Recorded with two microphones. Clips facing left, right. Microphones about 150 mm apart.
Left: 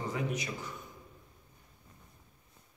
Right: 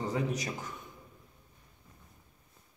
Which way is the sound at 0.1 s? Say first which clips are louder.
Right 2 dB; 40° right (ahead or behind).